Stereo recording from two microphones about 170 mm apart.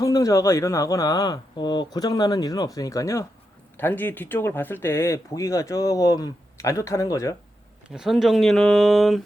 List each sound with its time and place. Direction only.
0.0 s speech: 20° left (ahead or behind)
7.9 s speech: 5° right (ahead or behind)